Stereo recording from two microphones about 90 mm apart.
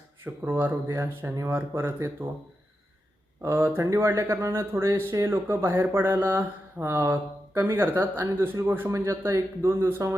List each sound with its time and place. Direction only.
0.4 s speech: 25° right (ahead or behind)
3.4 s speech: 25° right (ahead or behind)